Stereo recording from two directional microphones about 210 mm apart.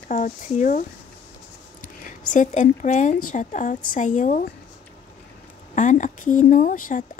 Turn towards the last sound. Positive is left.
turn(degrees=40)  # may be behind; listen again after turning